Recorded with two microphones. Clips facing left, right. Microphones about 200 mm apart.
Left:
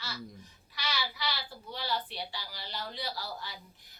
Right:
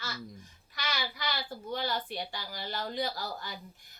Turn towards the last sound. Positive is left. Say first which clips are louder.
# right 2 dB
turn(degrees=-50)  # may be behind; listen again after turning